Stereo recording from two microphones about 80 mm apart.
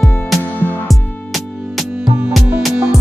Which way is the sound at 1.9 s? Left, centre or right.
Right.